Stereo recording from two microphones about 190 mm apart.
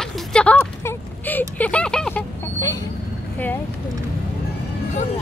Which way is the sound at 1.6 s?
5° left (ahead or behind).